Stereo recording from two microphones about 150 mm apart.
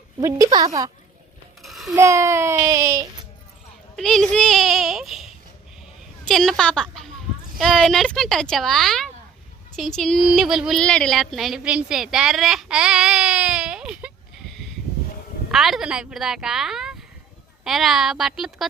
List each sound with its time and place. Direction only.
0.2 s speech: 20° right (ahead or behind)
1.6 s a sound: centre (ahead or behind)
2.0 s speech: 20° right (ahead or behind)
3.9 s a woman's voice: 5° left (ahead or behind)